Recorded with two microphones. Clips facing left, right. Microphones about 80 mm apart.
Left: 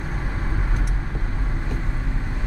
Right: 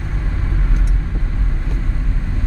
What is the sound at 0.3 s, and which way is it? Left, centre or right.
Vehicle, centre.